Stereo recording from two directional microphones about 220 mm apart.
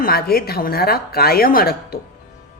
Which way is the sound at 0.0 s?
45° left (ahead or behind).